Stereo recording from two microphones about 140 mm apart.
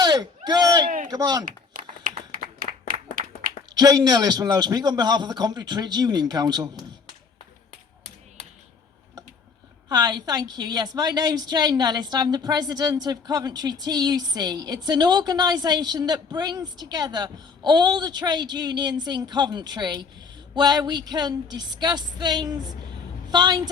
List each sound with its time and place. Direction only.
0.0 s a sound: 30° right (ahead or behind)
1.1 s a woman's voice: 30° right (ahead or behind)
1.5 s a sound: 75° right (ahead or behind)
2.8 s applause: 75° right (ahead or behind)
3.8 s a woman's voice: 25° right (ahead or behind)
9.9 s a woman's voice: 30° right (ahead or behind)